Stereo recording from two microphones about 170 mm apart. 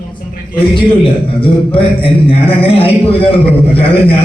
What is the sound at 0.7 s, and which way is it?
A man's voice, 30° left (ahead or behind).